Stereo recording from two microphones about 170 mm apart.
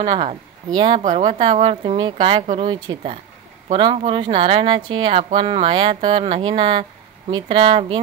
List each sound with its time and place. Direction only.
0.0 s speech: 25° right (ahead or behind)